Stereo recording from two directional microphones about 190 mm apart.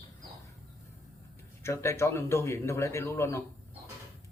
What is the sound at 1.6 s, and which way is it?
Speech, 15° left (ahead or behind).